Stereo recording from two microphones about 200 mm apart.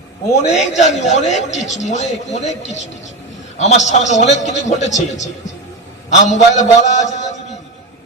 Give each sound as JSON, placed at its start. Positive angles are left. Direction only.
{"t": 0.4, "sound": "a man's voice", "side_deg": 35}